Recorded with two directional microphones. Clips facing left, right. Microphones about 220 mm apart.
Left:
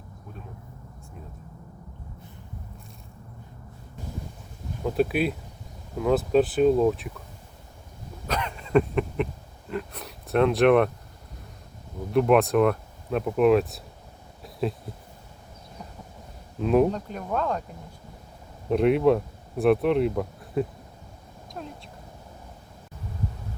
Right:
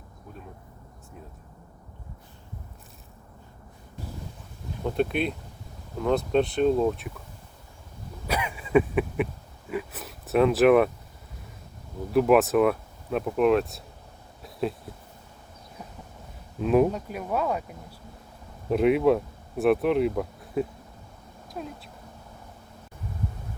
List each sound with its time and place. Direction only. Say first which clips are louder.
4.8 s speech: left 2 dB; 5° left (ahead or behind)
8.3 s a sound: even; 10° right (ahead or behind)
9.6 s speech: even; 5° right (ahead or behind)
12.1 s speech: even; centre (ahead or behind)
14.4 s a sound: left 1 dB; centre (ahead or behind)
16.6 s speech: even; centre (ahead or behind)
18.7 s speech: left 1 dB; centre (ahead or behind)